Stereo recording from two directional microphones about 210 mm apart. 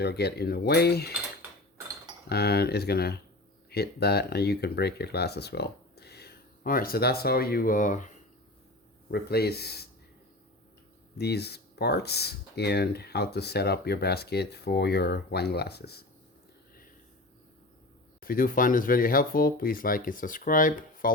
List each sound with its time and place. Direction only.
0.0 s speech: 50° left (ahead or behind)
2.3 s speech: 50° left (ahead or behind)
9.0 s speech: 50° left (ahead or behind)
11.2 s speech: 50° left (ahead or behind)
18.2 s speech: 45° left (ahead or behind)